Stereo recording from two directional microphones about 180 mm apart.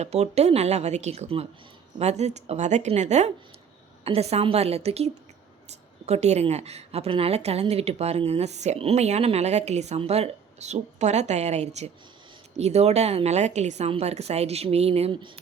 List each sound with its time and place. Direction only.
0.0 s a woman's voice: 35° right (ahead or behind)